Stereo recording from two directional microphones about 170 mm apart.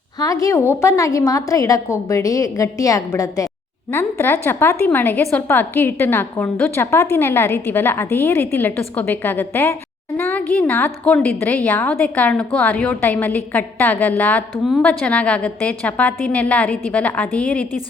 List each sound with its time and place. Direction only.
0.2 s a woman's voice: 20° left (ahead or behind)